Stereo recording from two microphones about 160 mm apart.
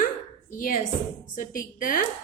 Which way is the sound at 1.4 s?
60° left (ahead or behind).